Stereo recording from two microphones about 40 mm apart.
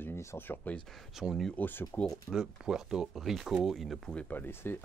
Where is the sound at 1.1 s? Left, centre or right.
Centre.